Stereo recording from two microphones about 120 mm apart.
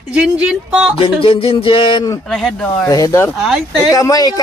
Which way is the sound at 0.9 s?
50° left (ahead or behind).